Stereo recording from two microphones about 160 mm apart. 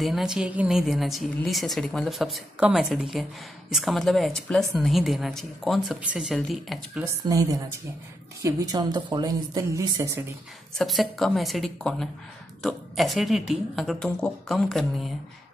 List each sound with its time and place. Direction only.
0.0 s speech: centre (ahead or behind)
7.2 s a woman's voice: 20° right (ahead or behind)
10.8 s speech: centre (ahead or behind)